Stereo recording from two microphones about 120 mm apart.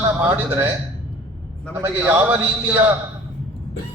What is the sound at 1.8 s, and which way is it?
Speech, 20° right (ahead or behind).